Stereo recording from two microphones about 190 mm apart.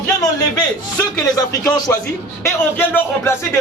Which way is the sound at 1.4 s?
20° left (ahead or behind).